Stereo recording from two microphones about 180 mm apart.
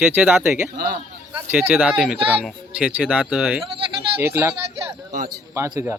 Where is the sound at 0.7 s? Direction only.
55° right (ahead or behind).